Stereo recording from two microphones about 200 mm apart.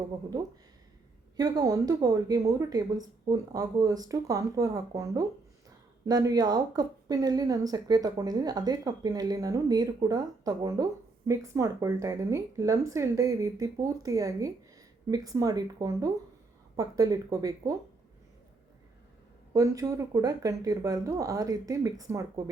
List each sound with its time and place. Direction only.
1.4 s speech: 20° right (ahead or behind)
19.5 s speech: 15° right (ahead or behind)